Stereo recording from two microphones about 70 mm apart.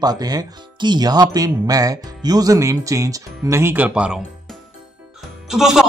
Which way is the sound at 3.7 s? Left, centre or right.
Centre.